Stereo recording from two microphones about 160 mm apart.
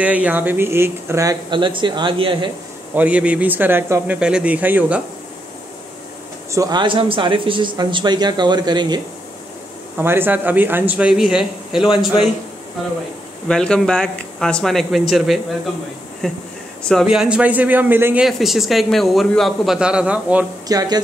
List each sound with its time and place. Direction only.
0.0 s speech: 10° right (ahead or behind); by 2.5 s 30° right (ahead or behind)
2.9 s speech: 10° right (ahead or behind)
6.5 s speech: 25° right (ahead or behind)
9.9 s speech: 15° right (ahead or behind)
13.5 s a man's voice: 5° left (ahead or behind); by 18.2 s 10° right (ahead or behind)
18.2 s a man's voice: centre (ahead or behind)
20.6 s speech: 25° right (ahead or behind)